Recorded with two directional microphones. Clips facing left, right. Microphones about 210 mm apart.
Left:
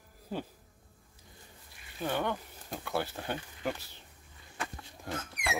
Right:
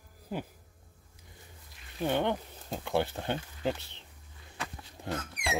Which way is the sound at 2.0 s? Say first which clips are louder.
Right 4 dB; 20° right (ahead or behind).